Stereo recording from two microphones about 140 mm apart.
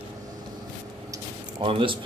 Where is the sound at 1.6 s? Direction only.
40° right (ahead or behind).